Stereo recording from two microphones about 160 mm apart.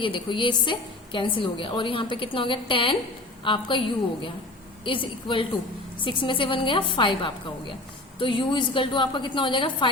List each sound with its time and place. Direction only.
0.0 s a woman's voice: 30° left (ahead or behind)